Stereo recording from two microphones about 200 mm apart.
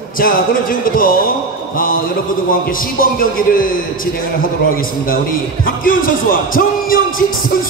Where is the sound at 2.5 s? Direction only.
45° left (ahead or behind).